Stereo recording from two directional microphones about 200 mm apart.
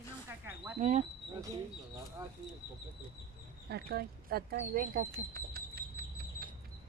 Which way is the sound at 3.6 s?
55° right (ahead or behind).